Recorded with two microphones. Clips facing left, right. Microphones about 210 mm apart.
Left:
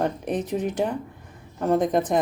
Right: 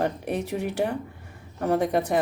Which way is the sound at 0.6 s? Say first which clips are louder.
Left 1 dB; 70° right (ahead or behind).